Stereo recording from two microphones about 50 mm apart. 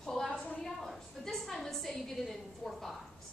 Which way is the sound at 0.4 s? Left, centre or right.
Left.